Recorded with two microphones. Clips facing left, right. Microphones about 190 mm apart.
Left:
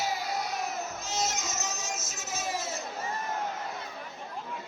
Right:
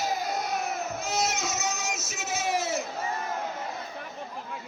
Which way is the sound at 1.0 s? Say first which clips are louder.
Right 4 dB; 60° right (ahead or behind).